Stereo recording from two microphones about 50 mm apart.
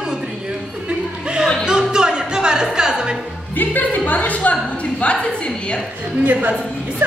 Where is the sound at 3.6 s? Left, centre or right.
Left.